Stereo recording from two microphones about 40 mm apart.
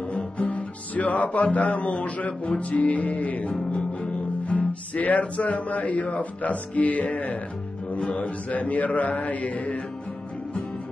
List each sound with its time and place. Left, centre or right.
0.4 s music: left
2.5 s speech: left